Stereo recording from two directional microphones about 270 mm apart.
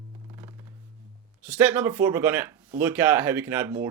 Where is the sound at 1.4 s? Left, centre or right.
Centre.